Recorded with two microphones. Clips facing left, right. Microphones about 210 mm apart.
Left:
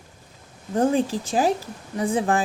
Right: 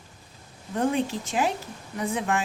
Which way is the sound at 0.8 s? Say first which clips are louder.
Left 4 dB; 35° left (ahead or behind).